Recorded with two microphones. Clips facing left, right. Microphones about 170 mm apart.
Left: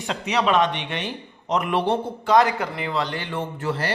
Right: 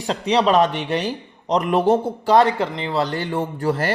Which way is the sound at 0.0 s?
35° right (ahead or behind).